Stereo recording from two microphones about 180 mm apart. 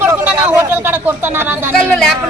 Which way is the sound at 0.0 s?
10° right (ahead or behind).